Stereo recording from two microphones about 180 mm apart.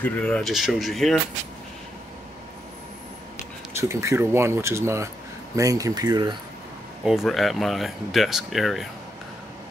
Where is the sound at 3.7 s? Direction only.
15° right (ahead or behind).